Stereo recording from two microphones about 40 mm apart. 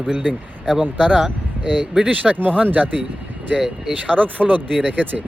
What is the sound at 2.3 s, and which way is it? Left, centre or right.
Speech, right.